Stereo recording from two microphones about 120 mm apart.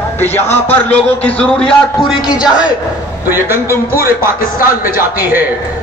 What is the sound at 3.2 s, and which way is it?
A man's voice, 20° right (ahead or behind).